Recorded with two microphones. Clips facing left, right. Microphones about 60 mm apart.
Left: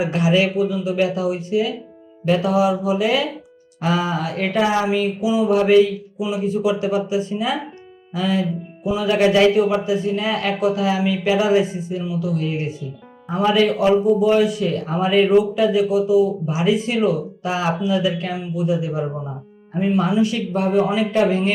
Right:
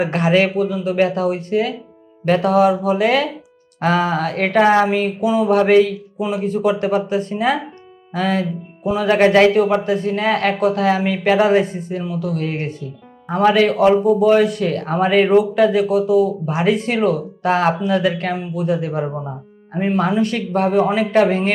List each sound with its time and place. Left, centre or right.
0.0 s speech: right